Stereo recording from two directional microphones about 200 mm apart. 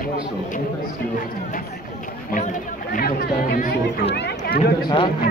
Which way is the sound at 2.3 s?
40° left (ahead or behind).